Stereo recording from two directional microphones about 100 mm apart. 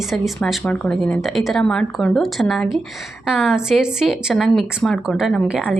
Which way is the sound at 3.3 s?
5° right (ahead or behind).